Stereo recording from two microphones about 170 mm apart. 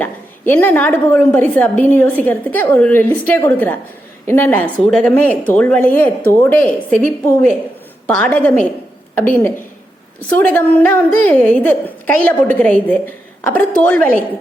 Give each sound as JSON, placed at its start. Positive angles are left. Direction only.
{"t": 0.0, "sound": "a woman's voice", "side_deg": 10}
{"t": 8.0, "sound": "a woman's voice", "side_deg": 10}